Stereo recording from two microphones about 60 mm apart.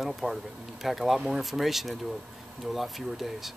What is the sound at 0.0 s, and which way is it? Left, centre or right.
Speech, centre.